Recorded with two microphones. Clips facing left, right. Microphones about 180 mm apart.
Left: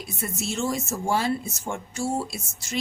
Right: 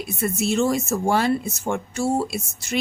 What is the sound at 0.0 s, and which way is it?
Speech, 65° right (ahead or behind).